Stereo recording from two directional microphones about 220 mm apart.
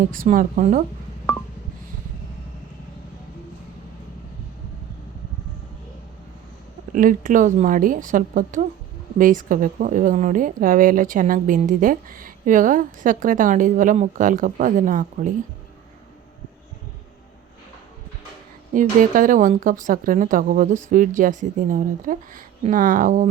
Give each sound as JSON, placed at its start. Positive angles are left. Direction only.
{"t": 0.0, "sound": "a woman's voice", "side_deg": -35}
{"t": 6.9, "sound": "a woman's voice", "side_deg": -40}
{"t": 18.7, "sound": "a woman's voice", "side_deg": -35}